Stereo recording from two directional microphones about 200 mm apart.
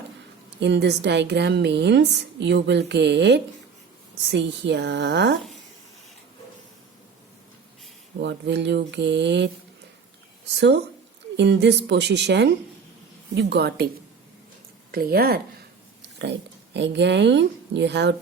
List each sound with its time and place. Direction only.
0.6 s a woman's voice: 60° right (ahead or behind)
8.2 s a woman's voice: 60° right (ahead or behind)
10.6 s a woman's voice: 55° right (ahead or behind)
14.9 s speech: 50° right (ahead or behind)
16.7 s a woman's voice: 60° right (ahead or behind)